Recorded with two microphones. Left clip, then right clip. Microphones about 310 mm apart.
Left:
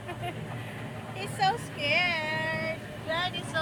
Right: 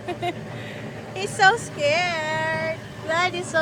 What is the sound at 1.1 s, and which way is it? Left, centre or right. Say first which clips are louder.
Vehicle: right 10 dB; right.